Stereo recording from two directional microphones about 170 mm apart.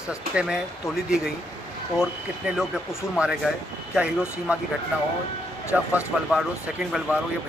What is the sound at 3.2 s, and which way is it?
A man's voice, 5° right (ahead or behind).